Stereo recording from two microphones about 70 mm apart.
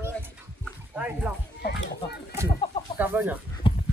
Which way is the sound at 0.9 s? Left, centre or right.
Centre.